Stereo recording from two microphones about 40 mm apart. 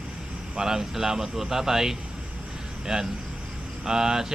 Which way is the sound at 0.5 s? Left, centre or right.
Centre.